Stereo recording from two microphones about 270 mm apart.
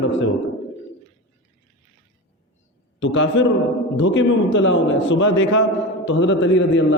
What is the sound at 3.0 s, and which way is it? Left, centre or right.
A man's voice, left.